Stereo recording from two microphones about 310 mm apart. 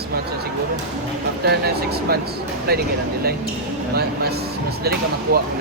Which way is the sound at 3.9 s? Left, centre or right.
Right.